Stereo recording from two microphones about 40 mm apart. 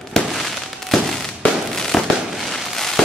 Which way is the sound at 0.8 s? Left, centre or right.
Centre.